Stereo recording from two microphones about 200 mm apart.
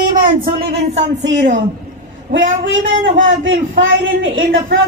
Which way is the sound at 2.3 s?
70° right (ahead or behind).